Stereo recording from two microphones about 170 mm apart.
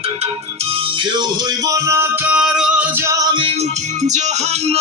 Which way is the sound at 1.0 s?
25° right (ahead or behind).